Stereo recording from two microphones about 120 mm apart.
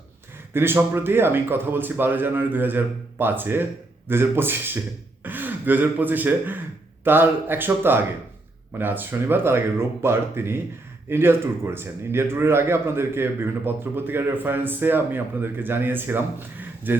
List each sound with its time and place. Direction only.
0.5 s speech: 20° right (ahead or behind)